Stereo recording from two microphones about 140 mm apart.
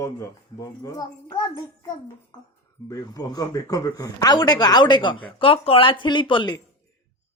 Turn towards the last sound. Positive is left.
turn(degrees=35)  # may be behind; listen again after turning